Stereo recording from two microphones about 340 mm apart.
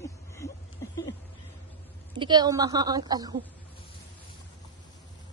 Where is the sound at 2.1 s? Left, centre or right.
Centre.